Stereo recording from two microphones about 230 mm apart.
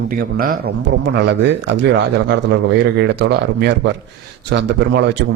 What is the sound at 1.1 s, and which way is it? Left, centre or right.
A man's voice, right.